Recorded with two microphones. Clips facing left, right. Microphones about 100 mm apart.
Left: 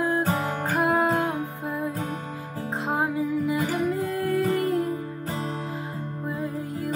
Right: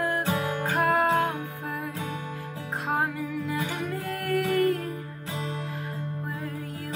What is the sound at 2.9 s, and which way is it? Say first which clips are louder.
Music: left 3 dB; 20° left (ahead or behind).